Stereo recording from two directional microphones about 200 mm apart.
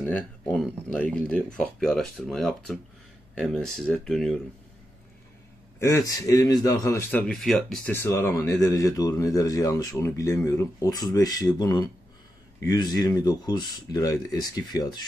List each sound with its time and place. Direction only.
0.0 s speech: 5° left (ahead or behind)
5.8 s a man's voice: 15° left (ahead or behind)